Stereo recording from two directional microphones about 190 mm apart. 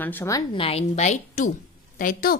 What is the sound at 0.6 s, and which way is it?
A woman's voice, 35° left (ahead or behind).